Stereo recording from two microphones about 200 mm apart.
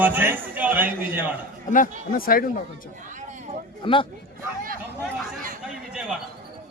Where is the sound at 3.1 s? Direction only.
40° right (ahead or behind).